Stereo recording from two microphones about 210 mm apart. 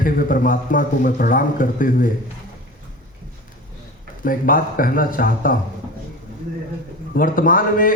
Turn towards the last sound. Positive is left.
turn(degrees=40)  # may be behind; listen again after turning